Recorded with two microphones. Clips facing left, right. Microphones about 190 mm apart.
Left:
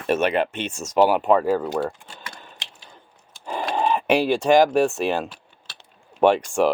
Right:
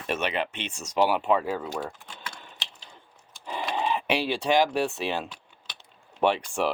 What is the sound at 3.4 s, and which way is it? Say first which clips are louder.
Speech: left 5 dB; 45° left (ahead or behind).